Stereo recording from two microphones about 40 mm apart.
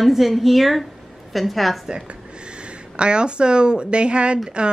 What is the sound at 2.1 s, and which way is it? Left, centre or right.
Speech, right.